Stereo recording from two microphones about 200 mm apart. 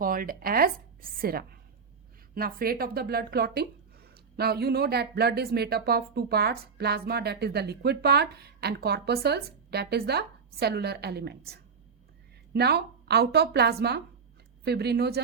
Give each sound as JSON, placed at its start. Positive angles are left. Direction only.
{"t": 0.0, "sound": "speech", "side_deg": -45}